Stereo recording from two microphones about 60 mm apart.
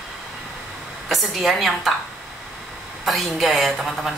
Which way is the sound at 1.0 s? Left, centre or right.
Centre.